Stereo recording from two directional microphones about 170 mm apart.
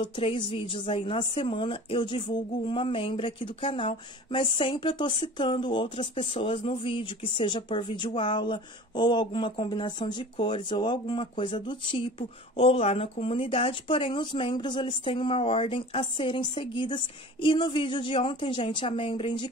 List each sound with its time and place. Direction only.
0.0 s a woman's voice: 30° left (ahead or behind)